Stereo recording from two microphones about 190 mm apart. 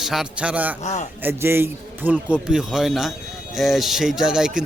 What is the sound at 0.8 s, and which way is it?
Speech, 35° left (ahead or behind).